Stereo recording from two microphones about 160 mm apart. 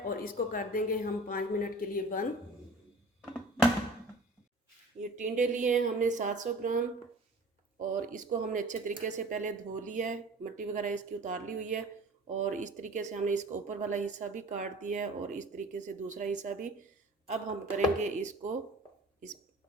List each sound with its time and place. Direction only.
0.0 s speech: 60° left (ahead or behind)
4.9 s speech: 50° right (ahead or behind)